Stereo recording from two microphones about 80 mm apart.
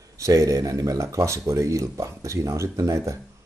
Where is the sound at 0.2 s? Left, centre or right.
Right.